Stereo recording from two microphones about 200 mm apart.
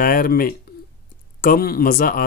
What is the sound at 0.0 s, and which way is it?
Speech, 45° left (ahead or behind).